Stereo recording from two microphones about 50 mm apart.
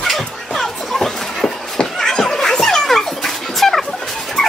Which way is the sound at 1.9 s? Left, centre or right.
Centre.